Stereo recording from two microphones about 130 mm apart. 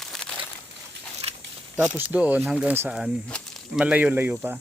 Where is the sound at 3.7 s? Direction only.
10° right (ahead or behind).